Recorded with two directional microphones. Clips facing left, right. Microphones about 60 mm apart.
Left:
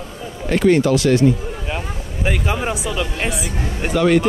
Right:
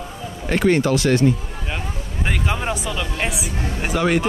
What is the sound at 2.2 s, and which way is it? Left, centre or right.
Speech, centre.